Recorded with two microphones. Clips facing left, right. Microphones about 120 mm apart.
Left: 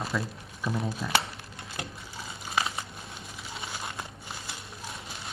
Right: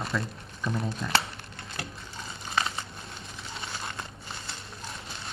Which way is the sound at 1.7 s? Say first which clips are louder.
Even; 15° left (ahead or behind).